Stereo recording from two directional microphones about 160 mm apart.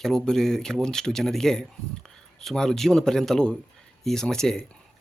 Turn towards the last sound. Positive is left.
turn(degrees=5)  # may be behind; listen again after turning